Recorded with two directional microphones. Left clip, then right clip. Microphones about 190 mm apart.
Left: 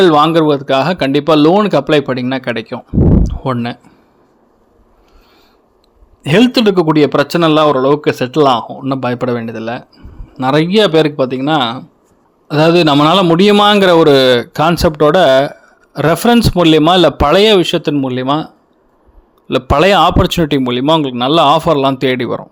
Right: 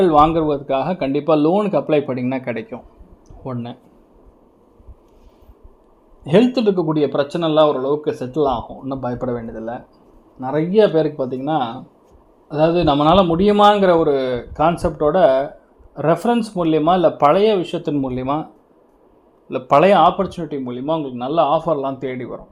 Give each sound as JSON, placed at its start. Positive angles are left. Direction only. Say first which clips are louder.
{"t": 0.0, "sound": "speech", "louder": "left 5 dB", "side_deg": 25}
{"t": 3.4, "sound": "a man's voice", "louder": "left 11 dB", "side_deg": 30}
{"t": 6.2, "sound": "a man's voice", "louder": "left 5 dB", "side_deg": 30}
{"t": 10.5, "sound": "a man's voice", "louder": "left 5 dB", "side_deg": 35}
{"t": 17.9, "sound": "speech", "louder": "left 6 dB", "side_deg": 20}
{"t": 19.5, "sound": "a man's voice", "louder": "left 3 dB", "side_deg": 35}